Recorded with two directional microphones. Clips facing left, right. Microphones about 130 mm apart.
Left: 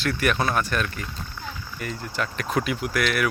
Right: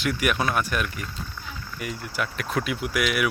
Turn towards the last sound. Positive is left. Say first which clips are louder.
# left 1 dB
turn(degrees=-10)  # may be behind; listen again after turning